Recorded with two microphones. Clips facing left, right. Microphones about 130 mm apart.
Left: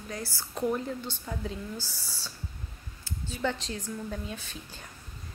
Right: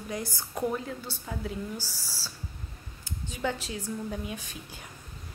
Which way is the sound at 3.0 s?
10° right (ahead or behind).